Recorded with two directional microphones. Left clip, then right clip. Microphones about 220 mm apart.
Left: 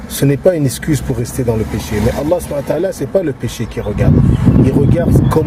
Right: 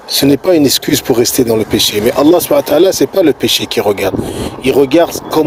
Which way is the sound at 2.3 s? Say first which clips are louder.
Right 7 dB; 40° right (ahead or behind).